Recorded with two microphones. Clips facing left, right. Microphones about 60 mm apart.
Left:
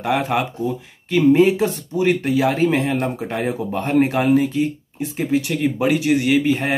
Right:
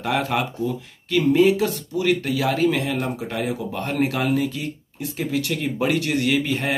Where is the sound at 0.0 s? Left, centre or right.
Centre.